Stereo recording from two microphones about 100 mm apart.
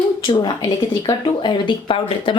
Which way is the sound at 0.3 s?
45° left (ahead or behind).